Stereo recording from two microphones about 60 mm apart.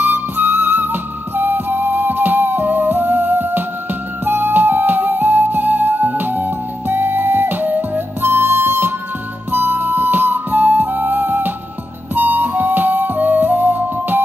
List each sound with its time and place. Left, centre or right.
0.0 s flute: right
4.2 s music: right